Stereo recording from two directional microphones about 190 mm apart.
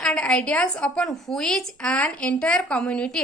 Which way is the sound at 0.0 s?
5° left (ahead or behind).